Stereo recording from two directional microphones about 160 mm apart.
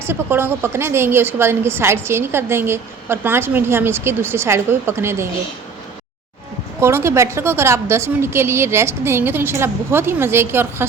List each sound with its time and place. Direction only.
0.0 s a woman's voice: 15° right (ahead or behind)
6.7 s a woman's voice: 15° right (ahead or behind)